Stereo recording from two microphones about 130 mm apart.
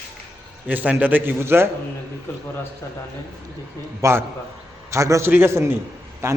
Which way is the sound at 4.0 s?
20° right (ahead or behind).